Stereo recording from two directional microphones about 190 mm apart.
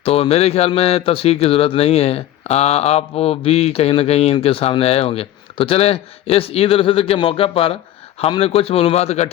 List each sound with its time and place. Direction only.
0.0 s a man's voice: 30° left (ahead or behind)